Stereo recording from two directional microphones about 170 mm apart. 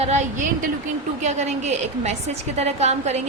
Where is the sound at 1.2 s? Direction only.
45° right (ahead or behind).